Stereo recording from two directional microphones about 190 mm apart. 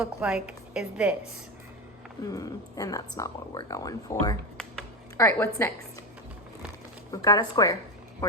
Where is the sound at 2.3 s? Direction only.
20° left (ahead or behind).